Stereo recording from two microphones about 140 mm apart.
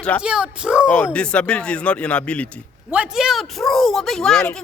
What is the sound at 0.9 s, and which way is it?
A man's voice, 10° left (ahead or behind).